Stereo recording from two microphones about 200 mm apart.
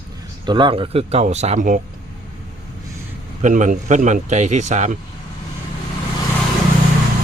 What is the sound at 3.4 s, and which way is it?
A man's voice, 40° right (ahead or behind).